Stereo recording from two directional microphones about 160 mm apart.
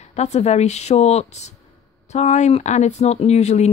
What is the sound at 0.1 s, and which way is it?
Speech, 45° left (ahead or behind).